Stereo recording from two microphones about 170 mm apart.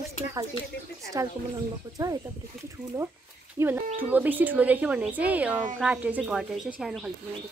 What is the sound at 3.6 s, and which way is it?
Speech, 15° right (ahead or behind).